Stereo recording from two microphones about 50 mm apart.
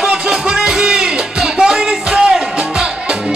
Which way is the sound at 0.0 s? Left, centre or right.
Centre.